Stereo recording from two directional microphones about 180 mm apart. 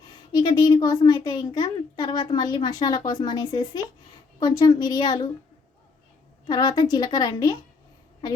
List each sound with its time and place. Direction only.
0.0 s a child's voice: 25° left (ahead or behind)
6.5 s a child's voice: 25° left (ahead or behind)